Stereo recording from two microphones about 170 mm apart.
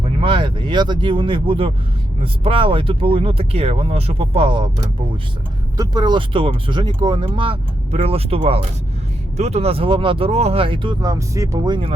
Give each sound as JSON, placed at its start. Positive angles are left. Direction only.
{"t": 0.0, "sound": "speech", "side_deg": -30}
{"t": 5.7, "sound": "speech", "side_deg": -20}